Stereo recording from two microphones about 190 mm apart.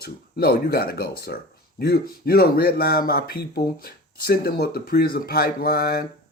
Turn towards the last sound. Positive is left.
turn(degrees=55)  # may be behind; listen again after turning